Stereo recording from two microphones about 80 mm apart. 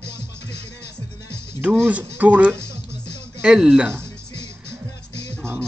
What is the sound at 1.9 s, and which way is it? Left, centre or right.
Speech, right.